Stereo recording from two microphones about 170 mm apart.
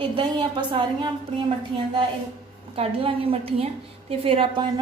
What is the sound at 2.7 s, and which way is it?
A woman's voice, 35° right (ahead or behind).